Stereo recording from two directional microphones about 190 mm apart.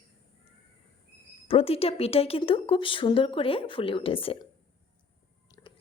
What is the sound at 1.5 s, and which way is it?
Speech, 30° left (ahead or behind).